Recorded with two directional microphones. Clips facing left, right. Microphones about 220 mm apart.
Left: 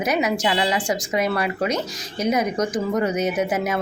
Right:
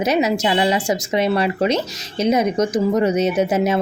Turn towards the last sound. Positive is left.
turn(degrees=-25)  # may be behind; listen again after turning